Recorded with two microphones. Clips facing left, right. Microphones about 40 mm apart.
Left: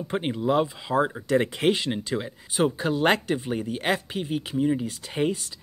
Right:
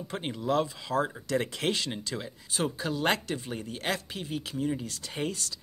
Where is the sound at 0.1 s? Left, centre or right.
Left.